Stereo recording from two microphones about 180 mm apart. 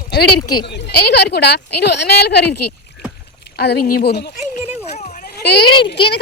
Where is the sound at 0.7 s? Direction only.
65° left (ahead or behind).